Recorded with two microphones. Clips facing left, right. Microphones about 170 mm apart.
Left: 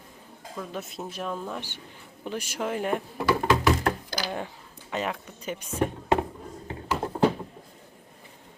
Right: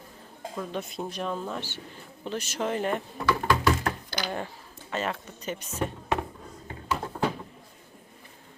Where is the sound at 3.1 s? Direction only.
25° left (ahead or behind).